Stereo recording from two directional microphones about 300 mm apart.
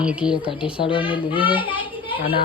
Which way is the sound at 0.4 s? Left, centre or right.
Centre.